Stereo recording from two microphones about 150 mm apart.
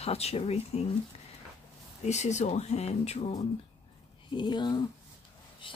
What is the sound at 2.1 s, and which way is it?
Speech, 50° left (ahead or behind).